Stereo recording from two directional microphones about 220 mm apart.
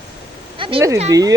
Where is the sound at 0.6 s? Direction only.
20° right (ahead or behind).